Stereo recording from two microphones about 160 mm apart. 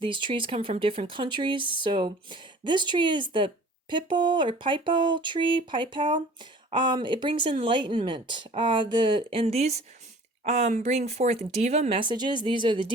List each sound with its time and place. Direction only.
0.0 s speech: 30° right (ahead or behind)